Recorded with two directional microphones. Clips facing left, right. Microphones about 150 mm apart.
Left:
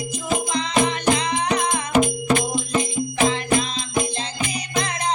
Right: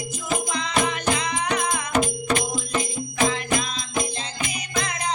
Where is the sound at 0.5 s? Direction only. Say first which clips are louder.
Left 5 dB; 30° left (ahead or behind).